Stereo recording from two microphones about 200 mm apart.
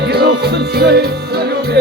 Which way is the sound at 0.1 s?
55° right (ahead or behind).